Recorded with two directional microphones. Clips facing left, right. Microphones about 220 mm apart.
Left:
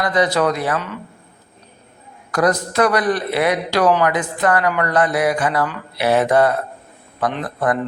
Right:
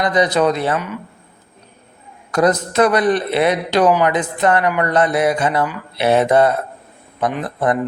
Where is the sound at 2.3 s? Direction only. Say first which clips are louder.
Right 2 dB; 25° right (ahead or behind).